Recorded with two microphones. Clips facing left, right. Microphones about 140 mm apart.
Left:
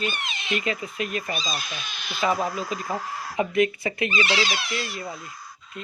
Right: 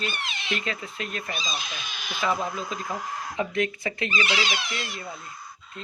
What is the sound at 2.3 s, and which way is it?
Speech, centre (ahead or behind).